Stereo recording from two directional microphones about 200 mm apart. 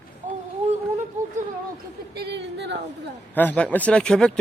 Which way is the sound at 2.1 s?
60° right (ahead or behind).